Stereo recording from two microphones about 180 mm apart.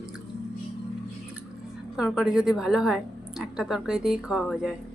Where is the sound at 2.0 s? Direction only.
5° right (ahead or behind).